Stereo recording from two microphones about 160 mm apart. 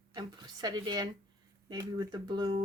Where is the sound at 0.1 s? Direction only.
25° right (ahead or behind).